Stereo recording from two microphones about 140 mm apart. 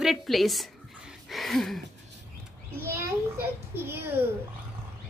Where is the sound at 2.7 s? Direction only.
20° right (ahead or behind).